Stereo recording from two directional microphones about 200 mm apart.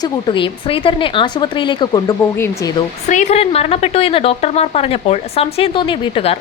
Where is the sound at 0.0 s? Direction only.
25° left (ahead or behind).